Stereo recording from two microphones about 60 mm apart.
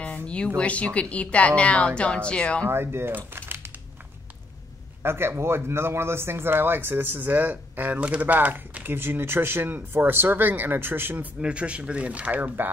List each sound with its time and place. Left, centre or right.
0.0 s a sound: centre
0.6 s a woman's voice: left
2.7 s speech: right
3.3 s a sound: right
5.0 s a man's voice: right
8.0 s speech: right
11.4 s speech: centre